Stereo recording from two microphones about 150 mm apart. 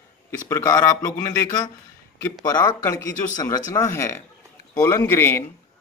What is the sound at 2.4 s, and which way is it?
Speech, 20° left (ahead or behind).